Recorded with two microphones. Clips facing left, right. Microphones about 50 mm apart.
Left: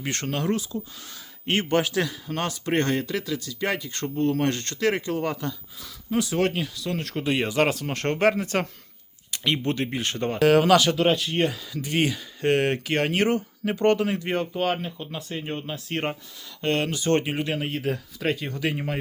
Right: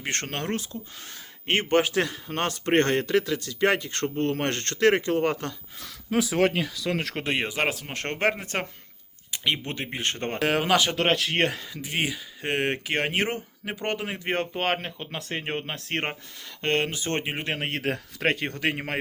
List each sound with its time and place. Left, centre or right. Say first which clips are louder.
0.0 s a man's voice: left 3 dB; right
1.5 s a man's voice: right 1 dB; right
2.5 s speech: right 3 dB; right
6.1 s speech: right 1 dB; right
7.3 s speech: left 5 dB; right
7.9 s speech: left 5 dB; right
10.4 s speech: left 5 dB; right
10.9 s speech: left 1 dB; right
11.7 s speech: left 4 dB; centre
14.3 s speech: right 1 dB; right
16.6 s speech: left 1 dB; right
17.4 s a man's voice: left 2 dB; right
17.7 s speech: left 1 dB; right